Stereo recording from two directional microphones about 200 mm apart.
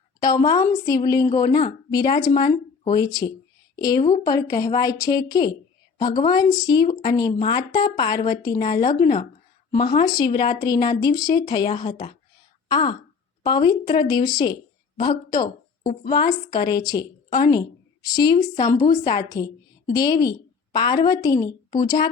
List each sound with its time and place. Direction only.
0.2 s a woman's voice: 20° left (ahead or behind)
10.1 s a woman's voice: 20° left (ahead or behind)